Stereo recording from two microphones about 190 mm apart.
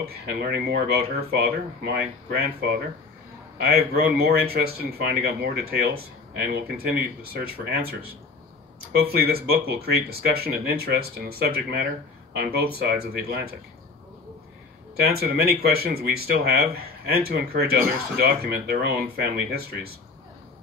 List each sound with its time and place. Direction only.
0.5 s speech: 55° right (ahead or behind)
15.0 s speech: 55° right (ahead or behind)